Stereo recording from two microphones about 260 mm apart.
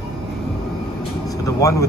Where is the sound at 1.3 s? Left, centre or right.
Centre.